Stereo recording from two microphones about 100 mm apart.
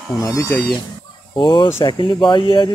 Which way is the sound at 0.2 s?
35° left (ahead or behind).